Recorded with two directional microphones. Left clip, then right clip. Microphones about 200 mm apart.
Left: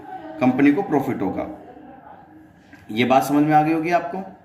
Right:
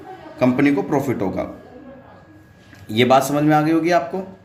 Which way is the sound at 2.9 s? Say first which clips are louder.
Right 2 dB; 55° right (ahead or behind).